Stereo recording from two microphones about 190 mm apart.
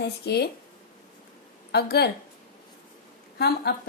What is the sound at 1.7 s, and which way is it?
Speech, 55° left (ahead or behind).